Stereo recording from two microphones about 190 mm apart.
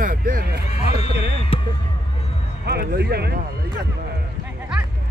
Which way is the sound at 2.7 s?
55° right (ahead or behind).